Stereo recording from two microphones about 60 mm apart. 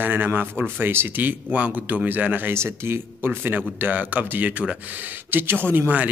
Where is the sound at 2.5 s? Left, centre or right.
Right.